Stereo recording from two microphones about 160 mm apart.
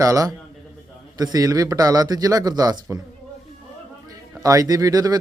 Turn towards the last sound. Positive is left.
turn(degrees=-25)  # may be behind; listen again after turning